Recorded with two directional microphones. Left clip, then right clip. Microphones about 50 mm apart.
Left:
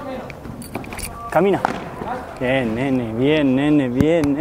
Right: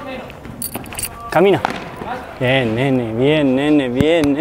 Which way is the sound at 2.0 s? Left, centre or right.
Right.